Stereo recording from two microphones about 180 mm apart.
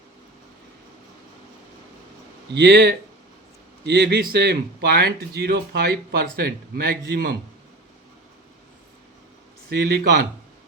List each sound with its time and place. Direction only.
2.5 s speech: 65° right (ahead or behind)
9.6 s speech: 60° right (ahead or behind)